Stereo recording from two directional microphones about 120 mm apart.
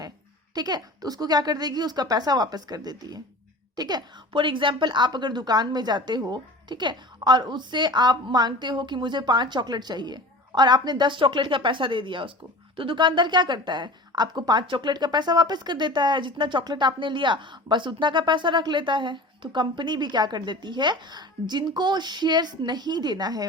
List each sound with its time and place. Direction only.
0.5 s a woman's voice: 35° right (ahead or behind)